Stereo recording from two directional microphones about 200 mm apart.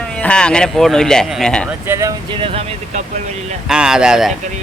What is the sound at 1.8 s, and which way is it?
Speech, 15° right (ahead or behind).